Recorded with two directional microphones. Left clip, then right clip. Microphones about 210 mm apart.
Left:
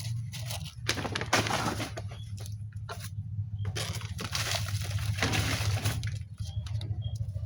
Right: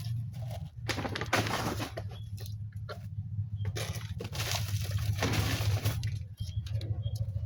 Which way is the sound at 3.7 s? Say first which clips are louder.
Left 3 dB; 15° left (ahead or behind).